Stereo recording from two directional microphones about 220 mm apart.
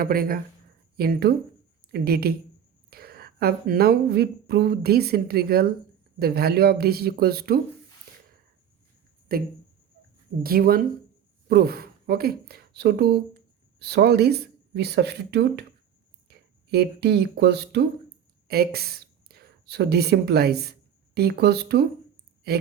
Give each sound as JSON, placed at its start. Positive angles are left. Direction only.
{"t": 0.0, "sound": "a woman's voice", "side_deg": -40}
{"t": 9.3, "sound": "speech", "side_deg": -40}
{"t": 16.7, "sound": "speech", "side_deg": -50}